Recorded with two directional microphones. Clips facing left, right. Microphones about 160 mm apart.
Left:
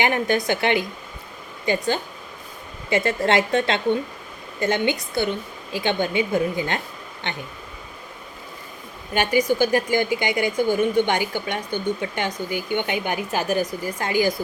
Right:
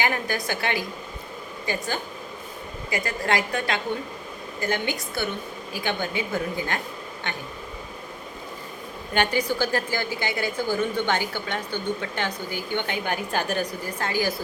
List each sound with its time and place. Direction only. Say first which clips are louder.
0.0 s a woman's voice: left 5 dB; 20° left (ahead or behind)
9.1 s a woman's voice: left 4 dB; 10° left (ahead or behind)